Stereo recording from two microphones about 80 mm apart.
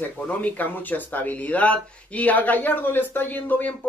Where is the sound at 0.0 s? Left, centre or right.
Left.